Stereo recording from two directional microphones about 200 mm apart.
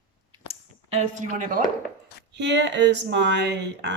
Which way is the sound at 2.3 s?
60° right (ahead or behind).